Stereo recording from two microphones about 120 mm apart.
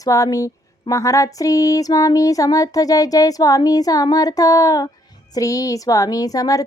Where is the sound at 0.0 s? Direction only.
30° left (ahead or behind).